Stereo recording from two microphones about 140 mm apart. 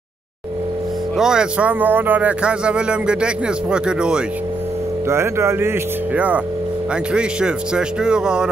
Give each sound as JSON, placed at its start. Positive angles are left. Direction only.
{"t": 1.1, "sound": "speech", "side_deg": -5}
{"t": 5.0, "sound": "speech", "side_deg": -20}